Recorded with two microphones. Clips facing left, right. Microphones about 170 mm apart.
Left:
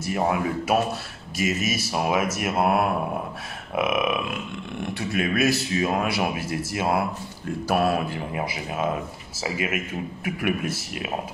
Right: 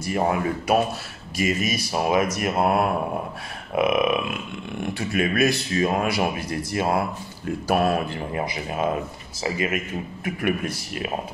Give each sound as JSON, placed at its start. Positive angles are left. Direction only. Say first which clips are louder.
{"t": 0.0, "sound": "a man's voice", "louder": "right 1 dB", "side_deg": 5}